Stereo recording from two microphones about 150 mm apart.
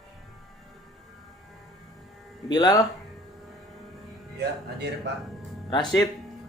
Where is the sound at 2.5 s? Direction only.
30° left (ahead or behind).